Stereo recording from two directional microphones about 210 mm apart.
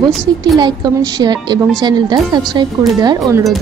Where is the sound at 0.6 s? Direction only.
20° right (ahead or behind).